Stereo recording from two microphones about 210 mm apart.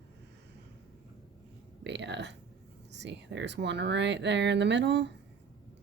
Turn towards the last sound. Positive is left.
turn(degrees=-55)  # may be behind; listen again after turning